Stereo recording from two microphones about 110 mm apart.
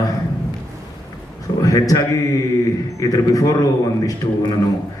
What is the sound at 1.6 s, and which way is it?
Speech, 30° left (ahead or behind).